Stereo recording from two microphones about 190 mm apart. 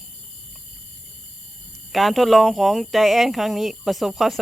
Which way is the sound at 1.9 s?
Centre (ahead or behind).